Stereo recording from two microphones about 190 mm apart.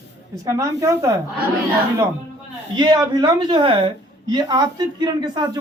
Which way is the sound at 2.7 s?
25° right (ahead or behind).